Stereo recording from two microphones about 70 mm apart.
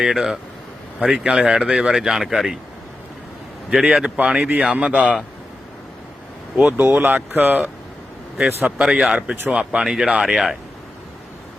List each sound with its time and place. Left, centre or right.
0.0 s speech: centre
3.7 s speech: centre
6.6 s speech: right
6.8 s speech: right
8.8 s speech: centre